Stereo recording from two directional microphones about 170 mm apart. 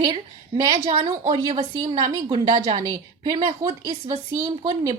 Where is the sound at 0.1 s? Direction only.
30° right (ahead or behind).